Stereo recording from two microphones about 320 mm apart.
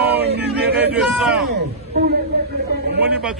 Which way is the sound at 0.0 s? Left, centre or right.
Right.